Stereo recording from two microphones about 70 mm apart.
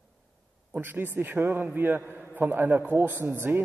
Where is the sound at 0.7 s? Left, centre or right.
Right.